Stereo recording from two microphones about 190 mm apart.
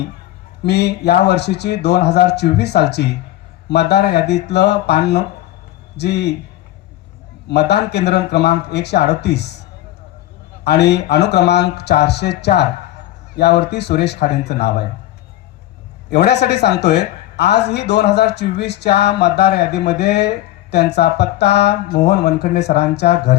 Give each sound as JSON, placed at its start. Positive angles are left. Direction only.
{"t": 0.6, "sound": "speech", "side_deg": 60}
{"t": 7.4, "sound": "speech", "side_deg": 60}
{"t": 10.6, "sound": "speech", "side_deg": 60}
{"t": 16.0, "sound": "speech", "side_deg": 60}